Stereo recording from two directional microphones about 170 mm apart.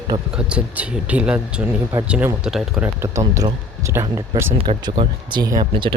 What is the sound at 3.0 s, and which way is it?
Speech, 20° right (ahead or behind).